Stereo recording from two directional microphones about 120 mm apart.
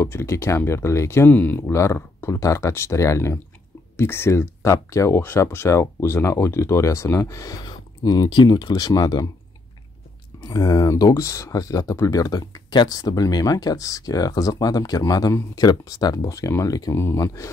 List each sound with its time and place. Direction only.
0.0 s speech: 20° left (ahead or behind)
10.4 s speech: 30° left (ahead or behind)